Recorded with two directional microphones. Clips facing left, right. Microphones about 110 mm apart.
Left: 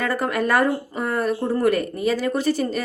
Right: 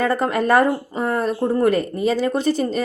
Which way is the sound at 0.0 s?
25° right (ahead or behind).